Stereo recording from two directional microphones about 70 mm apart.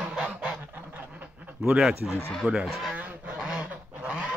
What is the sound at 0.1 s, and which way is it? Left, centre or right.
Goose, centre.